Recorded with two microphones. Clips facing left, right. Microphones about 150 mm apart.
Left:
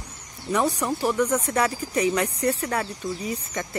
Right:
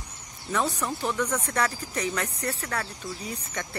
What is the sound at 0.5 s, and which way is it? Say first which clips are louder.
Speech: left 4 dB; 15° left (ahead or behind).